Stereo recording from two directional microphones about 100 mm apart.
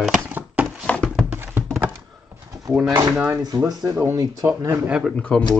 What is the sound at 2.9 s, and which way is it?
Speech, 20° right (ahead or behind).